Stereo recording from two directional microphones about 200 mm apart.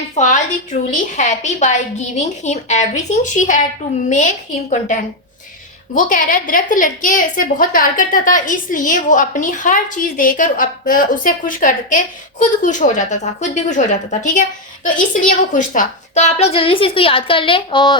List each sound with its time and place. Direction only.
0.2 s a woman's voice: 35° left (ahead or behind)